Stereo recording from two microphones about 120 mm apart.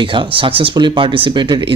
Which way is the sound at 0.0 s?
45° right (ahead or behind).